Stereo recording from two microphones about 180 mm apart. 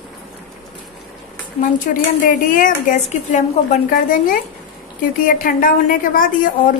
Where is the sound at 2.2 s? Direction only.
50° left (ahead or behind).